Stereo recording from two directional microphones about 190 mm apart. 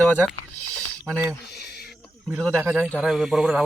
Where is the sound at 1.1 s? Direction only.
15° right (ahead or behind).